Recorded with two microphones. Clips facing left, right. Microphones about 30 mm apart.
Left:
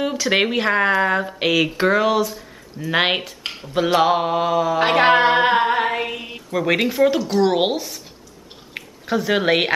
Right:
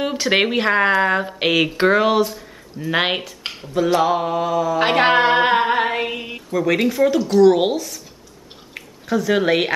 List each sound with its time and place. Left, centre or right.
0.0 s speech: centre
2.9 s speech: centre
3.7 s mantra: left
4.7 s female singing: centre
6.5 s speech: centre
7.3 s mantra: left
8.7 s speech: left